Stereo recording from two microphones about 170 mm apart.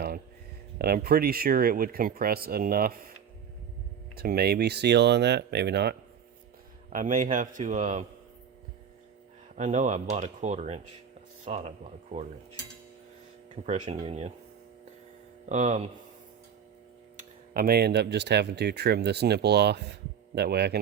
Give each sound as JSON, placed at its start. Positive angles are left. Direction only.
{"t": 0.8, "sound": "speech", "side_deg": -60}
{"t": 4.1, "sound": "speech", "side_deg": -70}
{"t": 6.9, "sound": "speech", "side_deg": -50}
{"t": 9.6, "sound": "speech", "side_deg": -45}
{"t": 13.8, "sound": "speech", "side_deg": -30}
{"t": 15.4, "sound": "speech", "side_deg": -40}
{"t": 17.2, "sound": "speech", "side_deg": -60}